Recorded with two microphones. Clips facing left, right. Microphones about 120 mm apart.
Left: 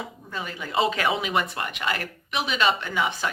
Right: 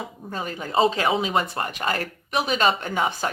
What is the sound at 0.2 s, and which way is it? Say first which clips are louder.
Speech: right 3 dB; 40° right (ahead or behind).